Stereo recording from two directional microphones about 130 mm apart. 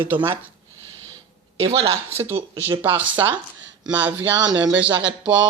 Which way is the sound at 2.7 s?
15° right (ahead or behind).